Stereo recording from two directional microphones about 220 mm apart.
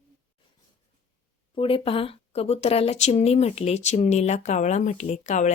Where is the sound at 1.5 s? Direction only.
25° left (ahead or behind).